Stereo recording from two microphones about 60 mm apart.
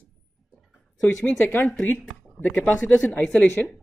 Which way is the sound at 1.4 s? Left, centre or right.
Left.